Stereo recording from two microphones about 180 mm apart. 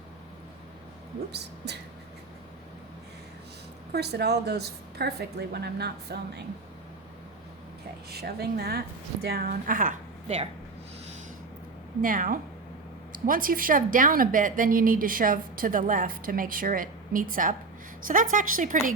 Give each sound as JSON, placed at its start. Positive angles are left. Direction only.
{"t": 1.3, "sound": "speech", "side_deg": -70}
{"t": 3.9, "sound": "speech", "side_deg": -65}
{"t": 8.1, "sound": "a woman's voice", "side_deg": -60}
{"t": 12.0, "sound": "a woman's voice", "side_deg": -50}